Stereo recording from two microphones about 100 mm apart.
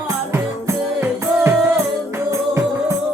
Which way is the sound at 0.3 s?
25° right (ahead or behind).